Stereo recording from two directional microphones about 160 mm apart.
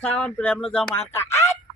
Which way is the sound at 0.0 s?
5° left (ahead or behind).